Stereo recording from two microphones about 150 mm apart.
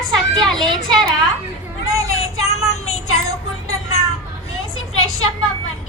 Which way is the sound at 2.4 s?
45° left (ahead or behind).